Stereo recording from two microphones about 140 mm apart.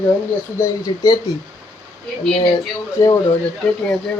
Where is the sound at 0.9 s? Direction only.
35° left (ahead or behind).